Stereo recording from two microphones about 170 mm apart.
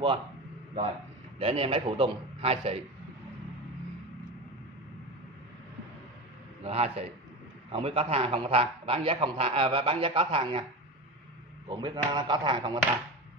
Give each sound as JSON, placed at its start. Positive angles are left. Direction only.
{"t": 1.4, "sound": "a man's voice", "side_deg": -35}
{"t": 6.6, "sound": "a man's voice", "side_deg": -35}
{"t": 11.6, "sound": "speech", "side_deg": -25}